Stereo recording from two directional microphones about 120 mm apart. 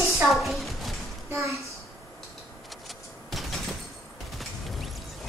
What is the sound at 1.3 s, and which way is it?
Speech, 25° right (ahead or behind).